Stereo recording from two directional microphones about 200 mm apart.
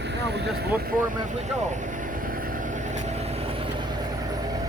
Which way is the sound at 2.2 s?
45° right (ahead or behind).